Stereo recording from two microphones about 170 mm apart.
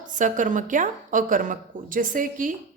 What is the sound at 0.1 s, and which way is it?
A woman's voice, 50° right (ahead or behind).